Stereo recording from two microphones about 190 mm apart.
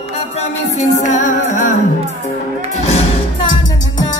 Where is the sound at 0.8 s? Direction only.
40° left (ahead or behind).